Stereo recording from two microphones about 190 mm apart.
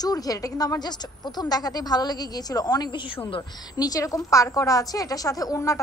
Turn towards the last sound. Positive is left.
turn(degrees=15)  # may be behind; listen again after turning